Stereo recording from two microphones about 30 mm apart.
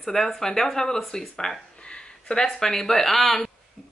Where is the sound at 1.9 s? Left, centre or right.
Left.